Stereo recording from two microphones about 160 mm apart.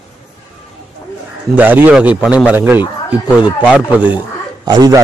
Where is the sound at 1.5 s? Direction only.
10° right (ahead or behind).